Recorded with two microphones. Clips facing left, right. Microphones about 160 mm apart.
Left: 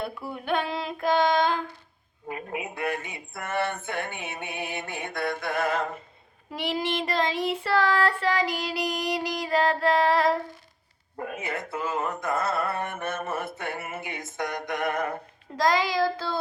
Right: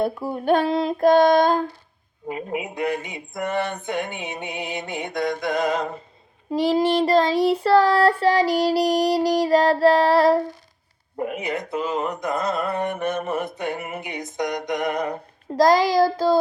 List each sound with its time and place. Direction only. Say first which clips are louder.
0.0 s child singing: right 10 dB; 40° right (ahead or behind)
2.2 s speech: right 6 dB; 20° right (ahead or behind)
6.5 s child singing: right 10 dB; 35° right (ahead or behind)
11.2 s speech: right 6 dB; 20° right (ahead or behind)
15.5 s child singing: right 7 dB; 40° right (ahead or behind)